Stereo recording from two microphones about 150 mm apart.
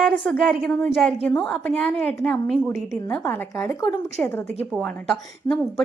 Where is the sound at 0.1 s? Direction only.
Centre (ahead or behind).